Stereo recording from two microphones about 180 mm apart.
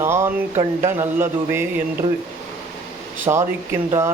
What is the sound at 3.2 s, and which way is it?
Speech, 15° right (ahead or behind).